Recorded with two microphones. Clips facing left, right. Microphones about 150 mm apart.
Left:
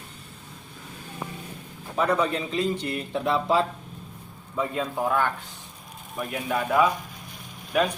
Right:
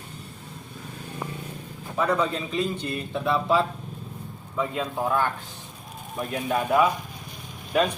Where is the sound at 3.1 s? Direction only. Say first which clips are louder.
Even; 25° left (ahead or behind).